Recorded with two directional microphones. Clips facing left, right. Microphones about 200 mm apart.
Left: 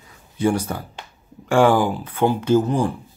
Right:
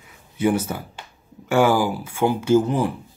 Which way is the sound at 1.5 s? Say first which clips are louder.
Left 2 dB; 5° right (ahead or behind).